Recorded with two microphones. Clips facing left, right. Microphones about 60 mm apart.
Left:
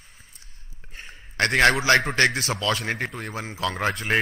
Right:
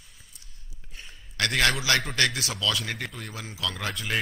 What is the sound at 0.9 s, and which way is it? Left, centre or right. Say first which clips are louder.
Speech: left 6 dB; left.